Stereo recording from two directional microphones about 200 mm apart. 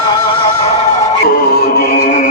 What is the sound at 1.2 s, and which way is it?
Music, 50° left (ahead or behind).